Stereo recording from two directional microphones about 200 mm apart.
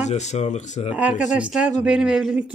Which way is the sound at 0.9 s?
5° right (ahead or behind).